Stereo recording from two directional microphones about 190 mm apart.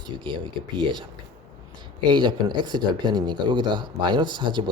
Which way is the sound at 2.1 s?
25° right (ahead or behind).